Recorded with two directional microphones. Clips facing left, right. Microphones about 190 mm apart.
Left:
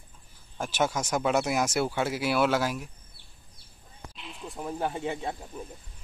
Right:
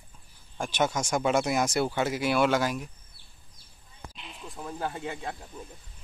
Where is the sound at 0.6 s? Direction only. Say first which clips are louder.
Even; 5° left (ahead or behind).